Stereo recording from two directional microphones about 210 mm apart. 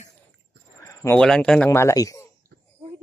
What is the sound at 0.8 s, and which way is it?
Speech, 15° left (ahead or behind).